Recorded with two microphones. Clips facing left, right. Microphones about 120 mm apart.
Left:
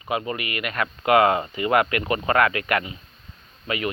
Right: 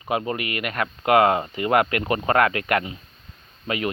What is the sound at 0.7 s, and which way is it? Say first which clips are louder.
Speech: even; 15° right (ahead or behind).